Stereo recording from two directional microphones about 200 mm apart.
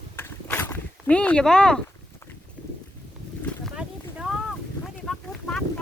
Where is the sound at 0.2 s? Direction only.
10° left (ahead or behind).